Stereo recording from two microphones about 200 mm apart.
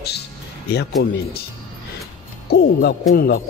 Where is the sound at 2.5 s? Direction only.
50° left (ahead or behind).